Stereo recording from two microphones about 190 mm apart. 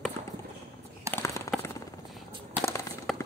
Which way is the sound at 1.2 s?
15° left (ahead or behind).